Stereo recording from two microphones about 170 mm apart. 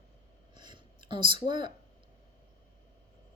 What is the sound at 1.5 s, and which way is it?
Speech, 25° right (ahead or behind).